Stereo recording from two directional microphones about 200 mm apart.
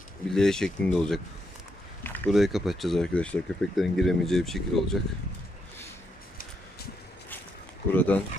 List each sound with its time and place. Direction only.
0.3 s speech: 5° left (ahead or behind)
2.0 s a sound: 10° left (ahead or behind)
2.3 s speech: centre (ahead or behind)
7.9 s speech: 10° left (ahead or behind)